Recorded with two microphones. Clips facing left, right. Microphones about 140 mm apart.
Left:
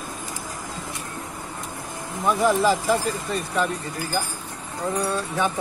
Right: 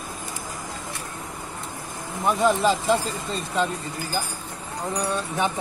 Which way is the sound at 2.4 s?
20° right (ahead or behind).